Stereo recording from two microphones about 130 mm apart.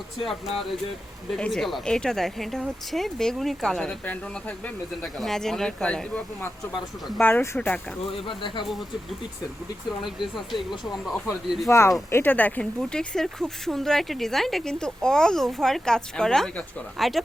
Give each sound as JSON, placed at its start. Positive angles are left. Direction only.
{"t": 1.3, "sound": "speech", "side_deg": 5}
{"t": 8.0, "sound": "speech", "side_deg": 40}
{"t": 8.6, "sound": "speech", "side_deg": 0}
{"t": 10.0, "sound": "speech", "side_deg": 0}
{"t": 11.7, "sound": "speech", "side_deg": 20}